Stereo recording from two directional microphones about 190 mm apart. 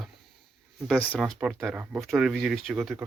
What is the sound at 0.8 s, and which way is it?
Speech, 5° left (ahead or behind).